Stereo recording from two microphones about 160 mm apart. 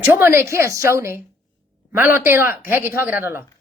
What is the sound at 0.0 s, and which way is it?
A woman's voice, 15° right (ahead or behind).